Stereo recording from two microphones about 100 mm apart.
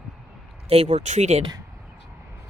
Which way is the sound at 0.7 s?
90° right.